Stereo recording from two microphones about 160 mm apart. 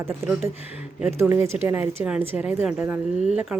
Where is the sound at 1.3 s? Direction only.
15° right (ahead or behind).